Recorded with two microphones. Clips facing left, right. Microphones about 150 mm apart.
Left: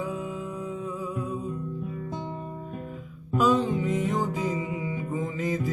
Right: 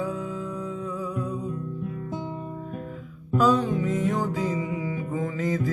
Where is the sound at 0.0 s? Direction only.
15° left (ahead or behind).